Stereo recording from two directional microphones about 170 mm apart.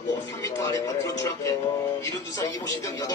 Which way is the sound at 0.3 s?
20° left (ahead or behind).